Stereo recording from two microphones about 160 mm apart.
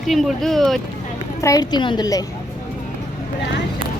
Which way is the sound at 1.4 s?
25° left (ahead or behind).